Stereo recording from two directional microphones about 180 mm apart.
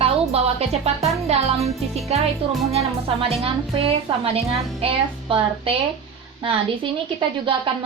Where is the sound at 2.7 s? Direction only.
35° right (ahead or behind).